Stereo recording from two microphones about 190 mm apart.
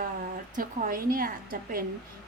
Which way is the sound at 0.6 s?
50° right (ahead or behind).